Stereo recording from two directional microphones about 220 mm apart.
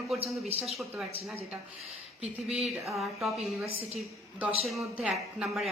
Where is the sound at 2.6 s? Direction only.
Centre (ahead or behind).